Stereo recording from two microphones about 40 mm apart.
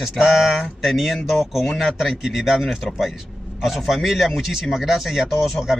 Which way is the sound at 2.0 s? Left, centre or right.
Centre.